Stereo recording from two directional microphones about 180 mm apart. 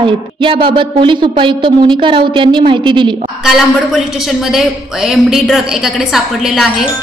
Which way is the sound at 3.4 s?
5° right (ahead or behind).